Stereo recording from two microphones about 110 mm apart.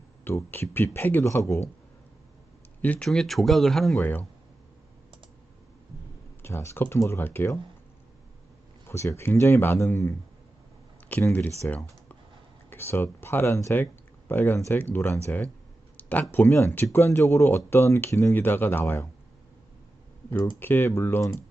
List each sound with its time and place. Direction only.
0.3 s speech: 20° left (ahead or behind)
2.8 s speech: 15° left (ahead or behind)
3.1 s speech: centre (ahead or behind)
4.0 s speech: 15° left (ahead or behind)
6.4 s speech: 25° left (ahead or behind)
8.9 s speech: 25° left (ahead or behind)
11.3 s speech: 15° left (ahead or behind)
12.7 s speech: 20° left (ahead or behind)
16.0 s a sound: 15° left (ahead or behind)
16.3 s speech: 20° left (ahead or behind)
20.6 s speech: 20° left (ahead or behind)